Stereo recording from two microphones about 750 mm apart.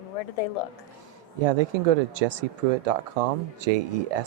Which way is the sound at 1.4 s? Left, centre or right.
Right.